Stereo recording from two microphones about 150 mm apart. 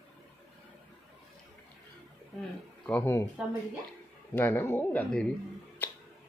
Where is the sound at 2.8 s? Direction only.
10° left (ahead or behind).